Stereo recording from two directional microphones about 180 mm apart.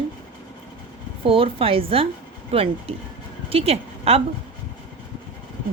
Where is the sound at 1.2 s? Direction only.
30° right (ahead or behind).